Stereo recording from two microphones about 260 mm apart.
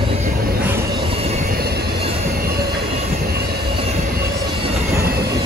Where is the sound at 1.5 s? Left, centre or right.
Right.